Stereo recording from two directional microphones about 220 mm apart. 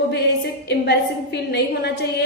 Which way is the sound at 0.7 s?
50° left (ahead or behind).